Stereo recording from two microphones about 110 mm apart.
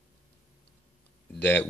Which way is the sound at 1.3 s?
15° left (ahead or behind).